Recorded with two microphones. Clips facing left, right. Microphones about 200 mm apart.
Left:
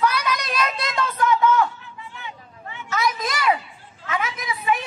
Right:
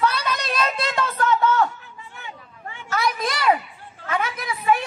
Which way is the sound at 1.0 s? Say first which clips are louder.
Left 1 dB; 15° left (ahead or behind).